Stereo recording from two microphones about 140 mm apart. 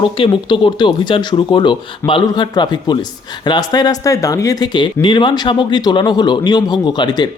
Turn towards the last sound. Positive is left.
turn(degrees=30)  # may be behind; listen again after turning